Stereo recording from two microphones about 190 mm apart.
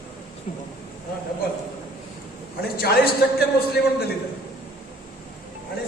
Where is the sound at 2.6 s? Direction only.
55° left (ahead or behind).